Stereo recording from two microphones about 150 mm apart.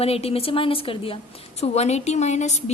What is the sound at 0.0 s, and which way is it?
A woman's voice, 40° left (ahead or behind).